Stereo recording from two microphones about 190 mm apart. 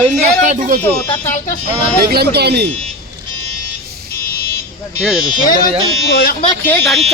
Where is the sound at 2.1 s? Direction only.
55° right (ahead or behind).